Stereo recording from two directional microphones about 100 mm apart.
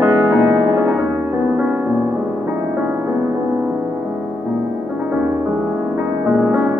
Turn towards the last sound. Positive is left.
turn(degrees=-20)  # may be behind; listen again after turning